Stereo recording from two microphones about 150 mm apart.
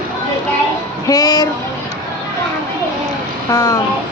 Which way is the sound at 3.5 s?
20° left (ahead or behind).